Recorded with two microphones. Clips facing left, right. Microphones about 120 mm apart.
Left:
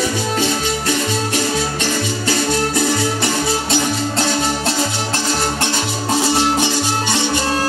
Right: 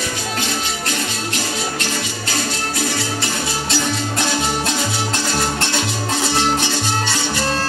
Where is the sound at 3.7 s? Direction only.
30° left (ahead or behind).